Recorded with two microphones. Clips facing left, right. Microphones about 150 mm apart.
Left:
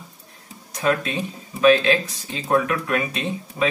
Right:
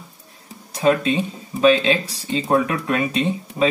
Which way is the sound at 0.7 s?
25° right (ahead or behind).